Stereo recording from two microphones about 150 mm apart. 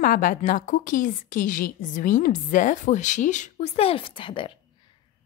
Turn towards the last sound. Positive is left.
turn(degrees=35)  # may be behind; listen again after turning